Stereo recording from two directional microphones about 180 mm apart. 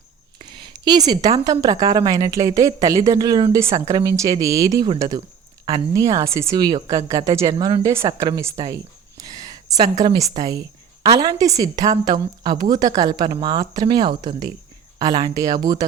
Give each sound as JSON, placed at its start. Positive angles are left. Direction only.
{"t": 0.4, "sound": "a woman's voice", "side_deg": -25}
{"t": 9.2, "sound": "a sound", "side_deg": -20}
{"t": 10.0, "sound": "a woman's voice", "side_deg": -20}